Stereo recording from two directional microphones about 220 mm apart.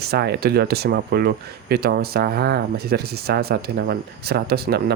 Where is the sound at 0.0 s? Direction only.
45° right (ahead or behind).